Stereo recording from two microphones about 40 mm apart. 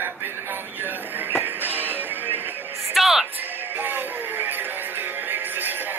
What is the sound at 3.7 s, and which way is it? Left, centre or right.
Music, right.